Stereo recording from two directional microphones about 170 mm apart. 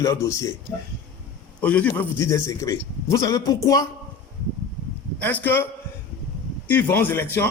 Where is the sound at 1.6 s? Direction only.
10° left (ahead or behind).